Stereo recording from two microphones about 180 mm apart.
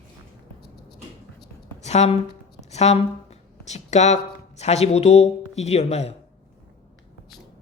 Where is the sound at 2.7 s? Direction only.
35° left (ahead or behind).